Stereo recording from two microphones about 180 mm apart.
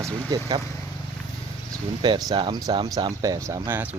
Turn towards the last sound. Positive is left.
turn(degrees=-10)  # may be behind; listen again after turning